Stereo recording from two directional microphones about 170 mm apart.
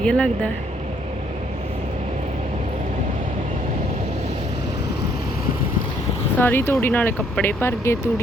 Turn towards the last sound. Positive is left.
turn(degrees=10)  # may be behind; listen again after turning